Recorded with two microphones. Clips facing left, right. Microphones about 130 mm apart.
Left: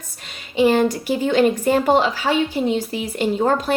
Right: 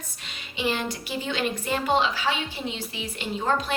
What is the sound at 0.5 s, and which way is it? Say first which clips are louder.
A woman's voice: left 12 dB; 45° left (ahead or behind).